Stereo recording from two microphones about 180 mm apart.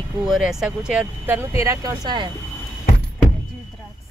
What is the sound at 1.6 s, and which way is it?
Speech, 20° right (ahead or behind).